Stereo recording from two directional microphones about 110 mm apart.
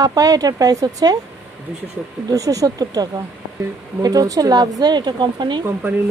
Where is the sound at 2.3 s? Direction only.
30° right (ahead or behind).